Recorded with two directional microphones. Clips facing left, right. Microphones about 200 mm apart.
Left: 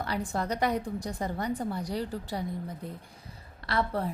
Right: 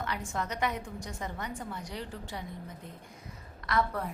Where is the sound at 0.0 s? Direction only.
35° left (ahead or behind).